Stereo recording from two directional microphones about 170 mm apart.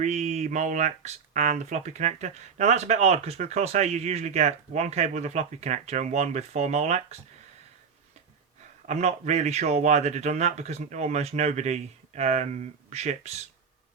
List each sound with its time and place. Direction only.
0.0 s speech: 45° right (ahead or behind)
8.9 s speech: 45° right (ahead or behind)